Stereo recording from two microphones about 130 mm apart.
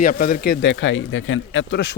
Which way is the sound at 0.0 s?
90° left.